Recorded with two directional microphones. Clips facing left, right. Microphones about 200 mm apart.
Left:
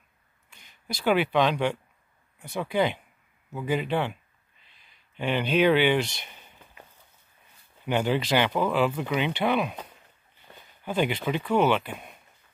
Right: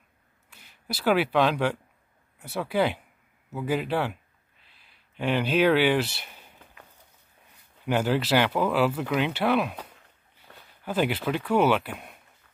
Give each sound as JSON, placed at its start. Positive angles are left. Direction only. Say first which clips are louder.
{"t": 0.5, "sound": "speech", "louder": "right 1 dB", "side_deg": -5}
{"t": 7.8, "sound": "speech", "louder": "right 1 dB", "side_deg": -5}